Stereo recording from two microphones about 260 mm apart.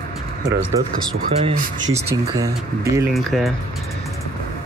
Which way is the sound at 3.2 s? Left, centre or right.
Centre.